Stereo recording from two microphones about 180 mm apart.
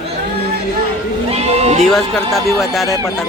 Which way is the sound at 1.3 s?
35° right (ahead or behind).